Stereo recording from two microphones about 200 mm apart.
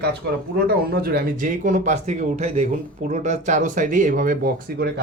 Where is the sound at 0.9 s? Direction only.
50° right (ahead or behind).